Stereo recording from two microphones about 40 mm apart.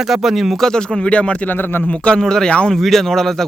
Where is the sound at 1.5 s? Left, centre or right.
Left.